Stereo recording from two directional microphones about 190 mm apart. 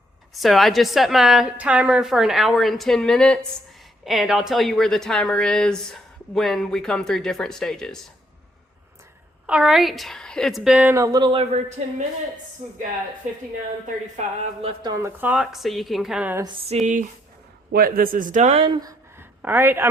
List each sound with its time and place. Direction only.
0.3 s speech: centre (ahead or behind)
9.5 s speech: 5° right (ahead or behind); by 12.8 s 40° right (ahead or behind)
14.6 s speech: 25° right (ahead or behind)
15.2 s speech: 5° right (ahead or behind)
16.8 s speech: 40° right (ahead or behind)
17.7 s speech: 50° right (ahead or behind); by 19.9 s 10° right (ahead or behind)